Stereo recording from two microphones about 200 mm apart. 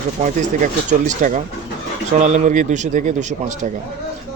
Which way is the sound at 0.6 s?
40° right (ahead or behind).